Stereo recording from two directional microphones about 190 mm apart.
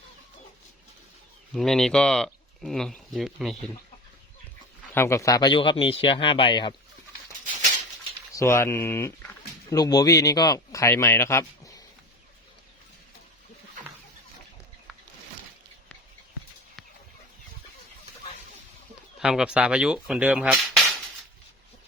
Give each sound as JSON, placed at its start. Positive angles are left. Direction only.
{"t": 1.5, "sound": "speech", "side_deg": 0}
{"t": 4.9, "sound": "a man's voice", "side_deg": 15}
{"t": 8.4, "sound": "speech", "side_deg": 15}
{"t": 19.2, "sound": "speech", "side_deg": -5}
{"t": 20.7, "sound": "a sound", "side_deg": 0}